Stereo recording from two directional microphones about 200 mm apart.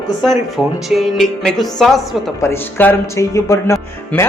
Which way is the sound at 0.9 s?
Centre (ahead or behind).